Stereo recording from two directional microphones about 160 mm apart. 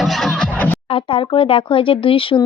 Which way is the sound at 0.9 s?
35° left (ahead or behind).